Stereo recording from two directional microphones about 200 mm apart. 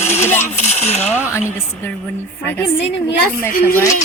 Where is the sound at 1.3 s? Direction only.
10° left (ahead or behind).